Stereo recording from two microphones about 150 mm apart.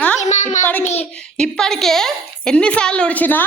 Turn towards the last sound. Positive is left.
turn(degrees=10)  # may be behind; listen again after turning